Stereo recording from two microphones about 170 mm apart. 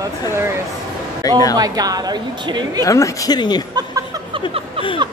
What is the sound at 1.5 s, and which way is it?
A woman's voice, 20° right (ahead or behind).